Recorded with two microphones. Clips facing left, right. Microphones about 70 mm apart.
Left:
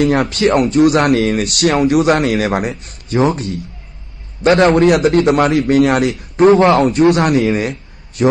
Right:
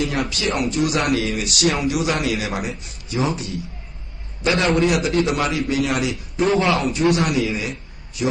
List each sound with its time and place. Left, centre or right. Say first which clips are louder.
0.3 s a man's voice: left 9 dB; left
4.4 s a man's voice: left 8 dB; left
6.5 s a man's voice: left 7 dB; left
6.8 s a man's voice: left 8 dB; left